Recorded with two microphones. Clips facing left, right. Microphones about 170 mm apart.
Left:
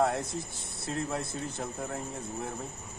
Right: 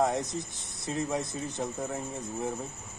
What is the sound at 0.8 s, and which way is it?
Speech, 15° right (ahead or behind).